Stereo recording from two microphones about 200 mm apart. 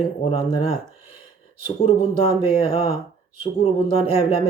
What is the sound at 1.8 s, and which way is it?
Speech, 30° left (ahead or behind).